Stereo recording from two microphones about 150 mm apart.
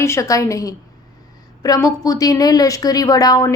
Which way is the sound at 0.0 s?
20° left (ahead or behind).